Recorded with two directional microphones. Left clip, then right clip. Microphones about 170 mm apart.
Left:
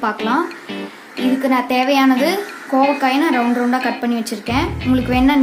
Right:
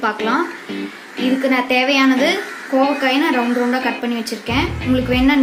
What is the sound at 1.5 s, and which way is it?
A woman's voice, 55° left (ahead or behind).